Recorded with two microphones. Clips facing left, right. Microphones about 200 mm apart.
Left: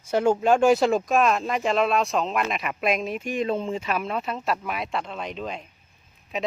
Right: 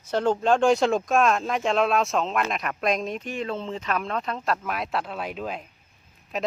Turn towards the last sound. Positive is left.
turn(degrees=0)  # may be behind; listen again after turning